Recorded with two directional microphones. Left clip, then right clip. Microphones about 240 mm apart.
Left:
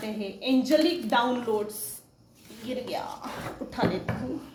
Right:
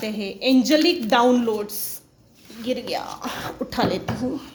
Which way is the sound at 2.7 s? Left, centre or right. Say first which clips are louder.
Right 6 dB; right.